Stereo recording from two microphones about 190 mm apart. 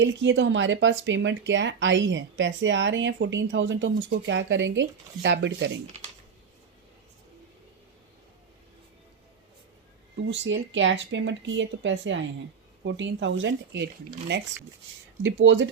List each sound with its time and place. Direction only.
0.0 s speech: 70° right (ahead or behind)
10.2 s speech: 75° right (ahead or behind)
15.2 s speech: 80° right